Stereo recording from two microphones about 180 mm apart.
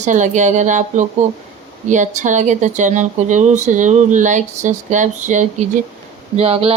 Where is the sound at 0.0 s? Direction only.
45° right (ahead or behind).